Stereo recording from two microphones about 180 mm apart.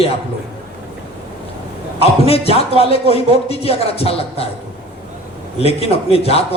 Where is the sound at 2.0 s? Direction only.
35° left (ahead or behind).